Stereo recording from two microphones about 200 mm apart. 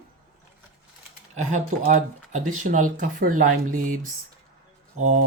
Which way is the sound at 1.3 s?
35° right (ahead or behind).